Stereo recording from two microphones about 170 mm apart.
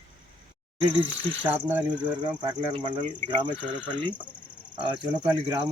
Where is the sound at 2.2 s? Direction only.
25° right (ahead or behind).